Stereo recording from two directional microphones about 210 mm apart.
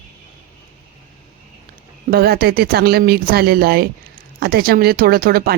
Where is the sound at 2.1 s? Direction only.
50° right (ahead or behind).